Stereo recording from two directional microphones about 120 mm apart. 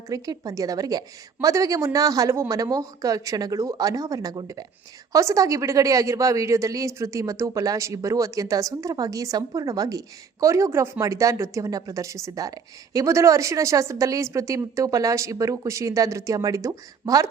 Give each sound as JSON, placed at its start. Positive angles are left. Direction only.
{"t": 0.1, "sound": "speech", "side_deg": -30}